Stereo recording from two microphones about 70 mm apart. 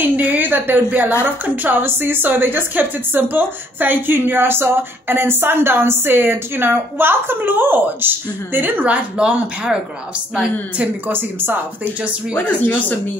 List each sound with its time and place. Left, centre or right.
0.0 s a woman's voice: right; by 10.9 s centre
11.1 s a woman's voice: right
12.4 s speech: left